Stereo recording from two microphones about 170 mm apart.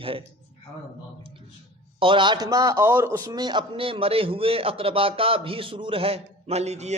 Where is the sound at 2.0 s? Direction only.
30° right (ahead or behind).